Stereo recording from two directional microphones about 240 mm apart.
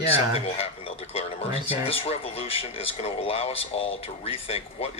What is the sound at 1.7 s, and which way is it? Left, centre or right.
Speech, left.